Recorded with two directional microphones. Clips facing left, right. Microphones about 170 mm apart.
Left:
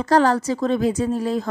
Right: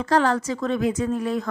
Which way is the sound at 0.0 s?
40° left (ahead or behind).